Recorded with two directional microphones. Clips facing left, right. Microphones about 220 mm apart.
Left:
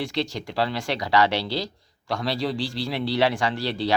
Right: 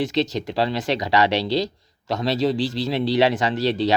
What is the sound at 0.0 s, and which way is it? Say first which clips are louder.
Speech: right 5 dB; 20° right (ahead or behind).